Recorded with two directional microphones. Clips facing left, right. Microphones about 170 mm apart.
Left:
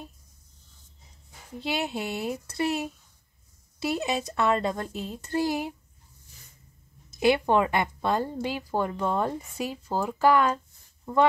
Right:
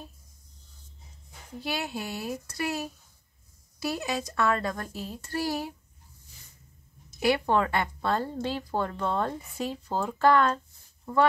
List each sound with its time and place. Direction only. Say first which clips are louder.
1.6 s speech: left 3 dB; 20° left (ahead or behind)
7.2 s speech: left 3 dB; 20° left (ahead or behind)